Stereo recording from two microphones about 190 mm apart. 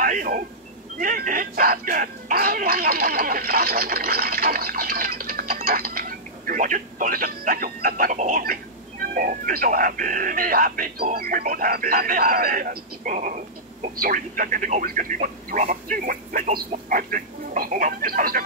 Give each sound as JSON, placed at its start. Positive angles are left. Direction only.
{"t": 0.0, "sound": "speech", "side_deg": -45}